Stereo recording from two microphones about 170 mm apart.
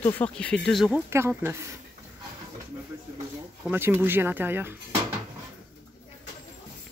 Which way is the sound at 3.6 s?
10° right (ahead or behind).